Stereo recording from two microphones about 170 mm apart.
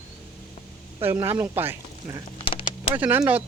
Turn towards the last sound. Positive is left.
turn(degrees=-10)  # may be behind; listen again after turning